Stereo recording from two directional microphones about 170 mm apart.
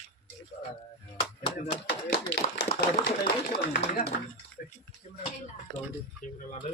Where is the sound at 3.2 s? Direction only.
50° left (ahead or behind).